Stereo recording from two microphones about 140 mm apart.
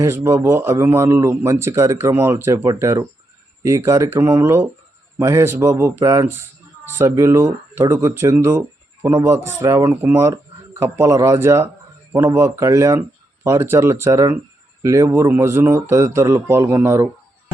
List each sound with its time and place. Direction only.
0.0 s speech: 20° right (ahead or behind)